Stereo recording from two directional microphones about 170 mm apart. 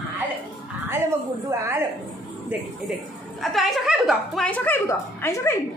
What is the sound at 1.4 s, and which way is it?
Speech, 15° right (ahead or behind).